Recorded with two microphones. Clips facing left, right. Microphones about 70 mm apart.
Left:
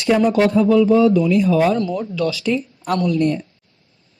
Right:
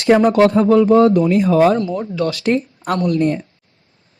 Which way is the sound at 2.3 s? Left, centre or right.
Right.